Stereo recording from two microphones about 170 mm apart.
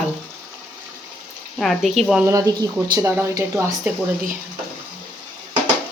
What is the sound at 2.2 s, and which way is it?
Speech, 20° right (ahead or behind).